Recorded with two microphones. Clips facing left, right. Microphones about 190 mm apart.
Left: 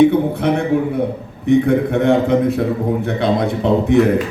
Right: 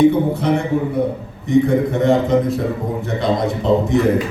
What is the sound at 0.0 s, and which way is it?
A man's voice, 60° left (ahead or behind).